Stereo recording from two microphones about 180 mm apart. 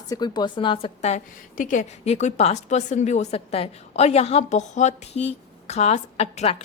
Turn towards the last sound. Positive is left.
turn(degrees=35)  # may be behind; listen again after turning